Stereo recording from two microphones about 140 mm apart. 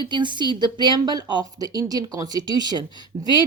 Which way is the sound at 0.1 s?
35° right (ahead or behind).